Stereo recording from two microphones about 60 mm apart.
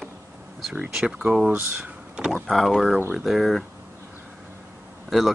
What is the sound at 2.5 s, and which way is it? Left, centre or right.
Speech, centre.